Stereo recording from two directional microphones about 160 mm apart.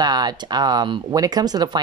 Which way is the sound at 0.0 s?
25° right (ahead or behind).